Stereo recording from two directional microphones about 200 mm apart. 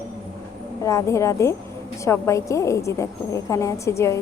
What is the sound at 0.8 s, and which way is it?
A woman's voice, 15° left (ahead or behind).